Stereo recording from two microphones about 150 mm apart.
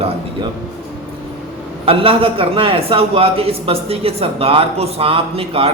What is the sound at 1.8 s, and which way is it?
A man's voice, 40° right (ahead or behind).